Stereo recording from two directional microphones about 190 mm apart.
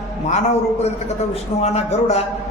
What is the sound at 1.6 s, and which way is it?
Speech, 35° left (ahead or behind).